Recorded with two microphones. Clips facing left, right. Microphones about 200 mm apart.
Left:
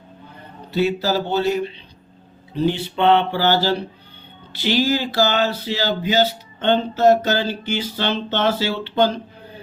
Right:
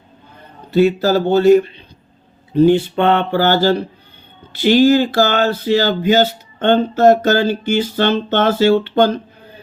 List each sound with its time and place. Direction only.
0.7 s speech: 50° right (ahead or behind)